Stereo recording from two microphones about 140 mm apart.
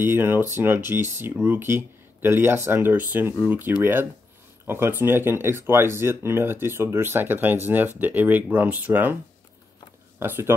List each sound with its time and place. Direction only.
0.0 s speech: 15° right (ahead or behind)
10.1 s speech: 15° right (ahead or behind)